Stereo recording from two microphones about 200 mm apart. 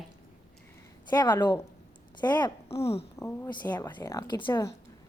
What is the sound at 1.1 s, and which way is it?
A woman's voice, 20° left (ahead or behind).